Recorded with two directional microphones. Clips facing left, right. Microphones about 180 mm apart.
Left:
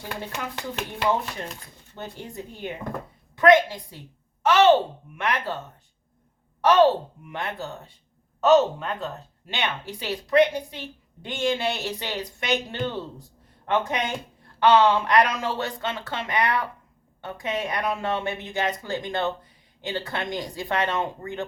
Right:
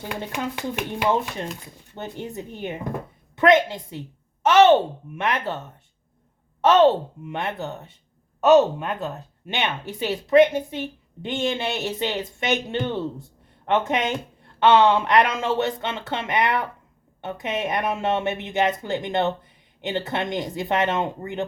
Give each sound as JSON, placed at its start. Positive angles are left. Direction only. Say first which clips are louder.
{"t": 0.1, "sound": "a woman's voice", "louder": "right 4 dB", "side_deg": -15}
{"t": 6.6, "sound": "a woman's voice", "louder": "right 2 dB", "side_deg": -20}